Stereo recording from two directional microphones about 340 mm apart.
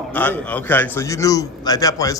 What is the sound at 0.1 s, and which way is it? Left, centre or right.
A man's voice, centre.